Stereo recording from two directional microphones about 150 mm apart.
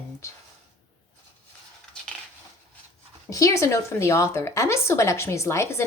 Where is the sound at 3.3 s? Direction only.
25° left (ahead or behind).